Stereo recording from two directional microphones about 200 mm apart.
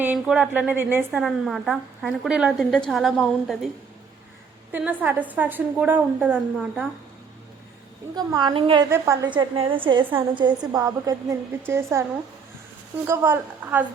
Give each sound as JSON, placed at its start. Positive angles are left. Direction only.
{"t": 0.0, "sound": "a woman's voice", "side_deg": -5}
{"t": 4.7, "sound": "a woman's voice", "side_deg": -10}
{"t": 8.1, "sound": "a woman's voice", "side_deg": -20}
{"t": 13.1, "sound": "a woman's voice", "side_deg": -10}